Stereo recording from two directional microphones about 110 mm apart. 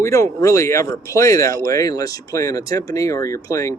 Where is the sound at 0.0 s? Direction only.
30° left (ahead or behind).